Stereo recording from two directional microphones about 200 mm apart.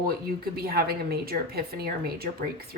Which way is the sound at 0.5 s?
50° right (ahead or behind).